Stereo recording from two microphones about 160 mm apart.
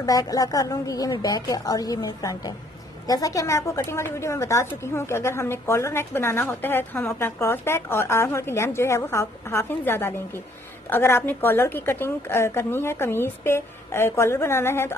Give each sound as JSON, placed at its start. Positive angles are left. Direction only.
{"t": 0.0, "sound": "a woman's voice", "side_deg": 20}